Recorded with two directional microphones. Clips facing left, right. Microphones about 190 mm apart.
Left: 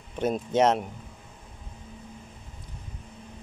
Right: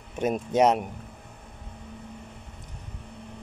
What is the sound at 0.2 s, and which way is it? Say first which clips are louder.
Speech: right 1 dB; 10° right (ahead or behind).